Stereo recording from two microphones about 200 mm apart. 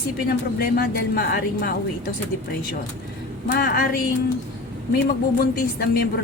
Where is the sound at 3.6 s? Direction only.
45° left (ahead or behind).